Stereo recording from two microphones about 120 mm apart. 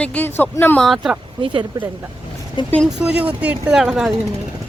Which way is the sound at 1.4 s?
45° right (ahead or behind).